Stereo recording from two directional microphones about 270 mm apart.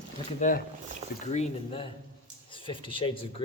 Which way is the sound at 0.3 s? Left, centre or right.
Left.